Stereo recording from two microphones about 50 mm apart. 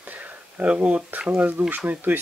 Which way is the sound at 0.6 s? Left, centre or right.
Right.